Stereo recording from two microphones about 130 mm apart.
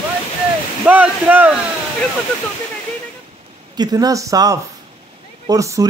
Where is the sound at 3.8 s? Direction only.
30° right (ahead or behind).